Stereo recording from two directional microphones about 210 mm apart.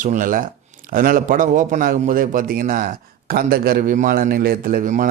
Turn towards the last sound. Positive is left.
turn(degrees=-40)  # may be behind; listen again after turning